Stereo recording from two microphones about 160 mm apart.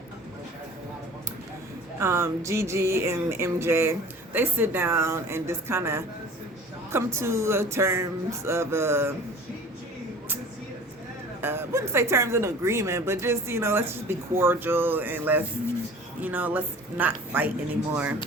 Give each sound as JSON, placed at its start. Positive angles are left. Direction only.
{"t": 2.0, "sound": "speech", "side_deg": -15}
{"t": 11.3, "sound": "speech", "side_deg": -15}